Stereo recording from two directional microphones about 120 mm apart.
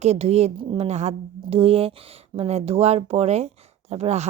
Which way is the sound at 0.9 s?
65° right (ahead or behind).